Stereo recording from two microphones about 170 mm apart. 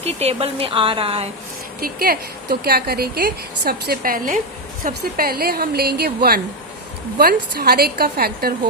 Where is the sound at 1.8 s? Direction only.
60° right (ahead or behind).